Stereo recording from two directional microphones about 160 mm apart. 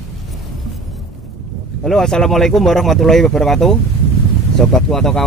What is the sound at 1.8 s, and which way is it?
Speech, 5° left (ahead or behind).